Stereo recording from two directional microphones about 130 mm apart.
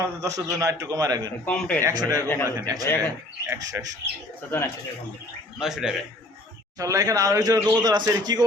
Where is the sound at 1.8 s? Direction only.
25° right (ahead or behind).